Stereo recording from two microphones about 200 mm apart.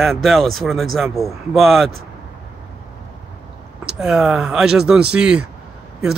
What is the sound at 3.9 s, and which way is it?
Speech, 5° right (ahead or behind).